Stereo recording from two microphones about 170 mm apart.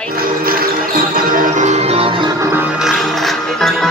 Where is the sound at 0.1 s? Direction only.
60° right (ahead or behind); by 2.5 s 25° right (ahead or behind).